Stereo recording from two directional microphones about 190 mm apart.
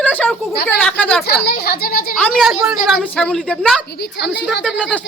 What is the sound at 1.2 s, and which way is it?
Speech, 55° left (ahead or behind).